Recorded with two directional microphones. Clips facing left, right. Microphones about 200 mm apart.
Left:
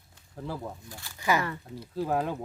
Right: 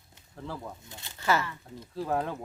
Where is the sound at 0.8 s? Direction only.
20° right (ahead or behind).